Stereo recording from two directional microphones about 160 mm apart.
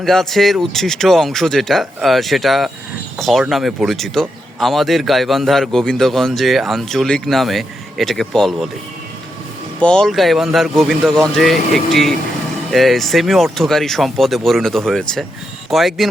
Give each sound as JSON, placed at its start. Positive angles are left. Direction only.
{"t": 0.0, "sound": "speech", "side_deg": 0}
{"t": 9.8, "sound": "speech", "side_deg": 5}